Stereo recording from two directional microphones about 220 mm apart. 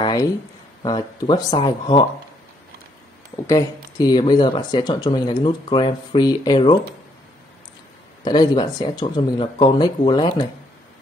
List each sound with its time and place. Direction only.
0.0 s a sound: 20° left (ahead or behind)
0.8 s speech: 20° left (ahead or behind)
3.4 s speech: 15° left (ahead or behind)
8.2 s speech: 20° left (ahead or behind)